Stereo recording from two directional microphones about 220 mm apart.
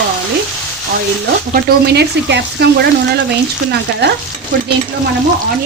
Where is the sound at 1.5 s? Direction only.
50° right (ahead or behind).